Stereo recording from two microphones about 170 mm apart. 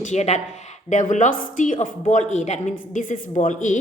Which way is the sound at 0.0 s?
40° left (ahead or behind).